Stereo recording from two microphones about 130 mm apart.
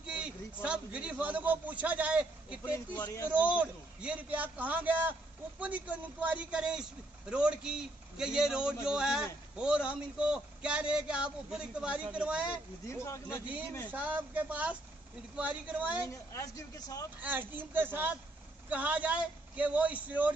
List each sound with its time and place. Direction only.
0.0 s a man's voice: 10° right (ahead or behind)
12.8 s speech: 20° left (ahead or behind)
13.8 s a man's voice: 15° right (ahead or behind)
16.1 s speech: 25° left (ahead or behind)
17.2 s a man's voice: 15° right (ahead or behind)